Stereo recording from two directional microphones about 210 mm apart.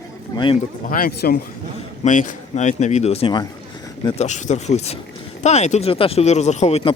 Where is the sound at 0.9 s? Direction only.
45° left (ahead or behind).